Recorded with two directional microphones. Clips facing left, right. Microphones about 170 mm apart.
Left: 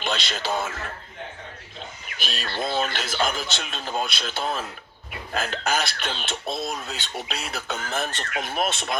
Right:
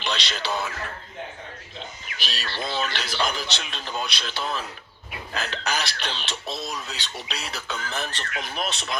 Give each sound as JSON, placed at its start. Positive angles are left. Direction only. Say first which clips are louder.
{"t": 0.0, "sound": "speech", "louder": "left 1 dB", "side_deg": 50}
{"t": 2.2, "sound": "speech", "louder": "left 3 dB", "side_deg": 50}